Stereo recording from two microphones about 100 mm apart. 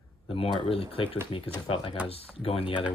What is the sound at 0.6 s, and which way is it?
Speech, 65° left (ahead or behind).